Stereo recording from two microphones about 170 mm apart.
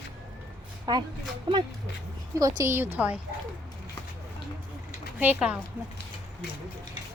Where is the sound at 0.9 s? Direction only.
25° right (ahead or behind).